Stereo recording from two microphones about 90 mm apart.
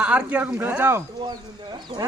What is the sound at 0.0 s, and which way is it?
Speech, 15° right (ahead or behind).